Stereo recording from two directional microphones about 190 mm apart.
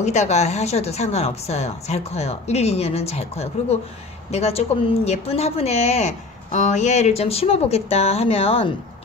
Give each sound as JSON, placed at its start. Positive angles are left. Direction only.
{"t": 0.0, "sound": "speech", "side_deg": 35}